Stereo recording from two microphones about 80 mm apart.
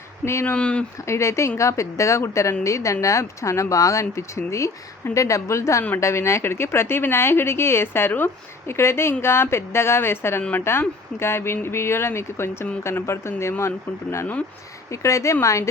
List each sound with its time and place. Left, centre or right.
0.3 s speech: left
0.5 s speech: centre
1.0 s speech: left